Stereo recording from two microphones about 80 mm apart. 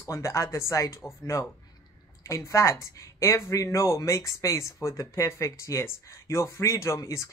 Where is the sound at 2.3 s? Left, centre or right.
Left.